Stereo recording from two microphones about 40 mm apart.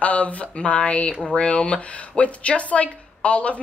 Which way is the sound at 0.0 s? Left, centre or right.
Left.